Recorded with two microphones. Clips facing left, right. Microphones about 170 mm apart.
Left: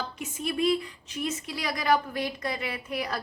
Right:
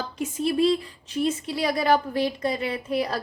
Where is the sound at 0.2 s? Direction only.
35° right (ahead or behind).